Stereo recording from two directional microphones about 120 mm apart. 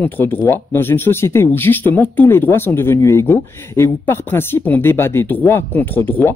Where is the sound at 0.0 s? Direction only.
15° left (ahead or behind).